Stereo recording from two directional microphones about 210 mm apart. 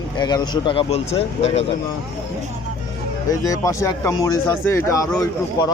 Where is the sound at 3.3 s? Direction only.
15° left (ahead or behind).